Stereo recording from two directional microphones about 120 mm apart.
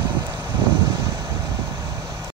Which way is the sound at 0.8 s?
35° right (ahead or behind).